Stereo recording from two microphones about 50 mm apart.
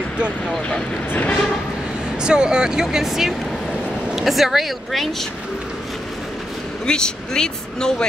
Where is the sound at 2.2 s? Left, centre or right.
Centre.